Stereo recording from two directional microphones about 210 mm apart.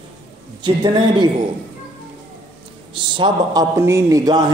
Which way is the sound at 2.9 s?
20° right (ahead or behind).